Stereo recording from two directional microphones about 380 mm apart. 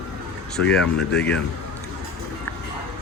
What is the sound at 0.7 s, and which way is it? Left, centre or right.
Speech, centre.